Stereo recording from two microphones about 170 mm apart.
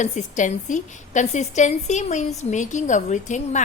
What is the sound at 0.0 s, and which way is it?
A woman's voice, 45° left (ahead or behind).